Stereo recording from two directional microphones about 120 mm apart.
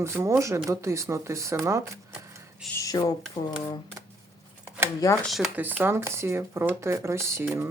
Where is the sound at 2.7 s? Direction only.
30° left (ahead or behind).